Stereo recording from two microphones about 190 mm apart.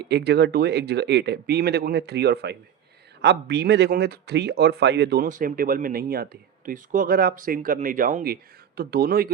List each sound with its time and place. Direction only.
0.1 s speech: 60° right (ahead or behind)